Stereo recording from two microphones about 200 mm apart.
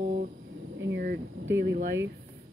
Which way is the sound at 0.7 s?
65° right (ahead or behind).